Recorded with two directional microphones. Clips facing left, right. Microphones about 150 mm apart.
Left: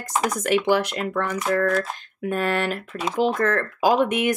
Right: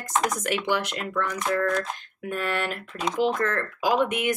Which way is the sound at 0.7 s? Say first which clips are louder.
Left 5 dB; 40° left (ahead or behind).